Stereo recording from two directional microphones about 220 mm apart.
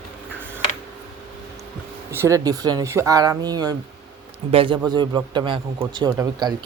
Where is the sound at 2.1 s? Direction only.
15° right (ahead or behind).